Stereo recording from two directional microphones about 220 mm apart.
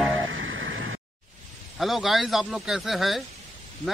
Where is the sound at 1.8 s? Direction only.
Centre (ahead or behind).